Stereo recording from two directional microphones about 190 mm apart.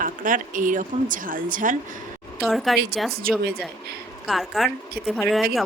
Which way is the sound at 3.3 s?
50° right (ahead or behind).